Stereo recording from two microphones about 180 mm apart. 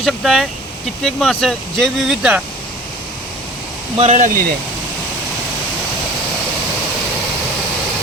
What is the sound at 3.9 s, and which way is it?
Speech, 40° right (ahead or behind).